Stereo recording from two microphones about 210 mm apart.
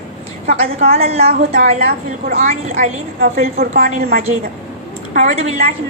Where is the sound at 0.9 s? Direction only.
30° right (ahead or behind).